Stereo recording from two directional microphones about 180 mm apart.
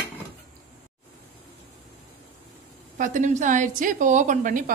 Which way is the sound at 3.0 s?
45° right (ahead or behind).